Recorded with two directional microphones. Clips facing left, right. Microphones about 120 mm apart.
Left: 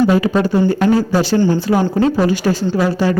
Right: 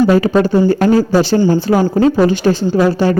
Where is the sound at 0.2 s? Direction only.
30° right (ahead or behind).